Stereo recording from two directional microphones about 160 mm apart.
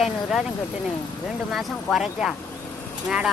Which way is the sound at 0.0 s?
Centre (ahead or behind).